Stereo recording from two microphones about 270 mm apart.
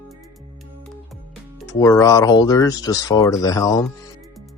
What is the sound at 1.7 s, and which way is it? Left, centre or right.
Speech, centre.